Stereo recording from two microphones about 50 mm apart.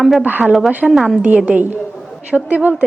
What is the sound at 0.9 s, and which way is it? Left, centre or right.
Speech, centre.